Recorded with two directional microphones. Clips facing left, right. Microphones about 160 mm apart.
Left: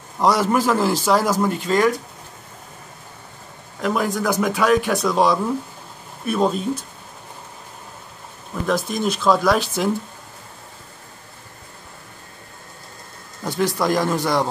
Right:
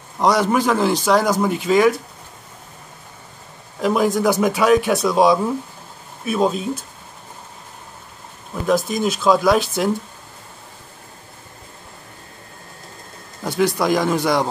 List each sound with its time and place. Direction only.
0.2 s a man's voice: centre (ahead or behind)
3.8 s a man's voice: 15° right (ahead or behind)
4.3 s a man's voice: 5° right (ahead or behind)
8.6 s a man's voice: centre (ahead or behind)
13.5 s a man's voice: centre (ahead or behind)